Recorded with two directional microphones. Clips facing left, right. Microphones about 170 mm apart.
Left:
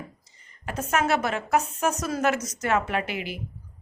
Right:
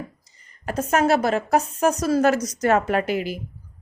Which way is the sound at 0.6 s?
40° right (ahead or behind).